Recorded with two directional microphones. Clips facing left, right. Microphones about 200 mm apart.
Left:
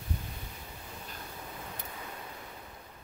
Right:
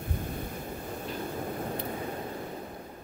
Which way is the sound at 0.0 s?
50° right (ahead or behind).